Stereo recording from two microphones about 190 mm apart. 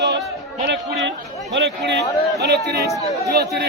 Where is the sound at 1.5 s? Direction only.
60° right (ahead or behind).